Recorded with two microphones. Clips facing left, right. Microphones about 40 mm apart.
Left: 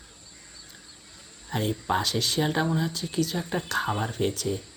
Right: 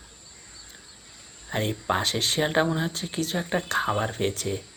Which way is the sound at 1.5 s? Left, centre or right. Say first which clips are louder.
Right 1 dB; right.